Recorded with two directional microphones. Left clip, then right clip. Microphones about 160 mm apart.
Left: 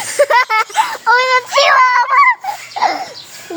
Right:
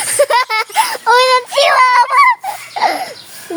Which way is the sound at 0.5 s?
30° right (ahead or behind).